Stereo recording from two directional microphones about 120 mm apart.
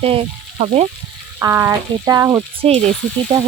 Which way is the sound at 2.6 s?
60° right (ahead or behind).